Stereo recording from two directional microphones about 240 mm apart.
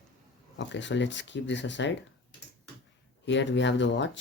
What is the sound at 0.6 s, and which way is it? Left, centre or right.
Speech, left.